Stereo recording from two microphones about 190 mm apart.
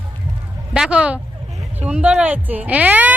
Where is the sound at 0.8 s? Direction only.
5° right (ahead or behind).